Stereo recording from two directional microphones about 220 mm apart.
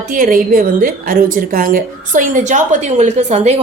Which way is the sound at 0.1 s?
40° right (ahead or behind).